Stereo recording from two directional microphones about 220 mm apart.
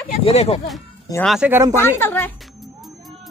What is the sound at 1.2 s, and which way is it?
Speech, 5° right (ahead or behind).